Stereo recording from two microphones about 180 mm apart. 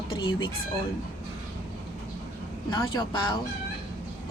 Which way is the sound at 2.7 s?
25° left (ahead or behind).